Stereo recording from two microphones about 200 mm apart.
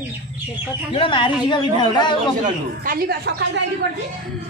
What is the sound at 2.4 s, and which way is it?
Speech, 45° right (ahead or behind).